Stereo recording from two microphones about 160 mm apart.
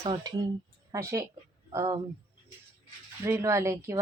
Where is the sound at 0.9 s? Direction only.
20° right (ahead or behind).